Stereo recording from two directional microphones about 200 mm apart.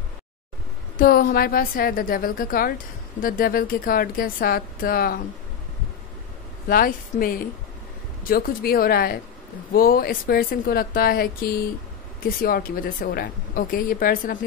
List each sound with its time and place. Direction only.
0.9 s a woman's voice: 45° left (ahead or behind)
6.7 s a woman's voice: 45° left (ahead or behind)